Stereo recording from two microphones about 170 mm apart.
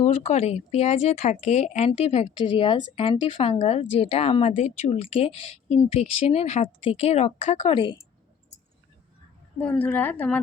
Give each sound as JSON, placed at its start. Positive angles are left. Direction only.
{"t": 0.0, "sound": "speech", "side_deg": 40}
{"t": 9.6, "sound": "a woman's voice", "side_deg": 10}